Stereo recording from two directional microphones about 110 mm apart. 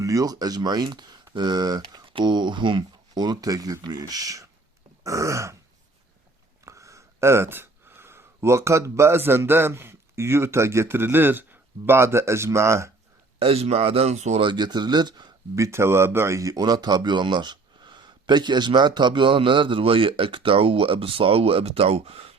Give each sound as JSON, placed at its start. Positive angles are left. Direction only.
{"t": 0.0, "sound": "speech", "side_deg": -30}
{"t": 6.7, "sound": "speech", "side_deg": -30}
{"t": 13.4, "sound": "speech", "side_deg": -65}
{"t": 14.4, "sound": "speech", "side_deg": -40}
{"t": 15.5, "sound": "speech", "side_deg": -25}